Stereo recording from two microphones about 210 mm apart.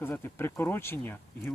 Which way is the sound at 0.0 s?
10° left (ahead or behind).